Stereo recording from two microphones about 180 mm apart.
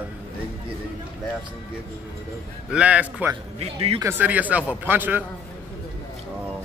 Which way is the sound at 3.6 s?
30° right (ahead or behind).